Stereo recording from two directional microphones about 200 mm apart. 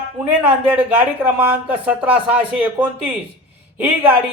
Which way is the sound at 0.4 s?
5° right (ahead or behind).